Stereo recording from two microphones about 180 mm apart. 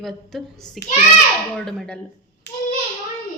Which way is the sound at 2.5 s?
65° left (ahead or behind).